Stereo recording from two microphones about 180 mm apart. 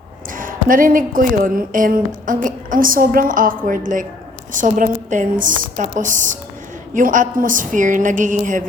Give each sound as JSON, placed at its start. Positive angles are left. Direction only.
{"t": 0.3, "sound": "a woman's voice", "side_deg": -50}